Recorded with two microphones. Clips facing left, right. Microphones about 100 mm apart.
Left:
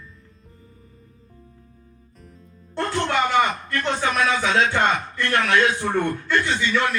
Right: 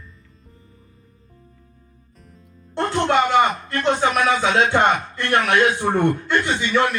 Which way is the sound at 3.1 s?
25° right (ahead or behind).